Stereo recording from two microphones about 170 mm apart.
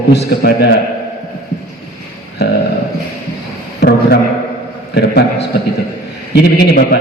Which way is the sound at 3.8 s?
75° left (ahead or behind).